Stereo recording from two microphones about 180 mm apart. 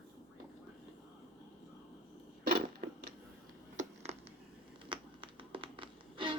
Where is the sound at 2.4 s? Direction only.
50° right (ahead or behind).